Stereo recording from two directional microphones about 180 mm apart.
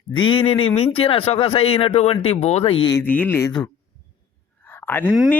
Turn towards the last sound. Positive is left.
turn(degrees=-5)  # may be behind; listen again after turning